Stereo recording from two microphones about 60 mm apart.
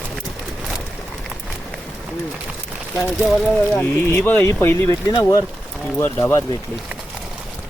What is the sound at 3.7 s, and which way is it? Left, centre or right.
Speech, left.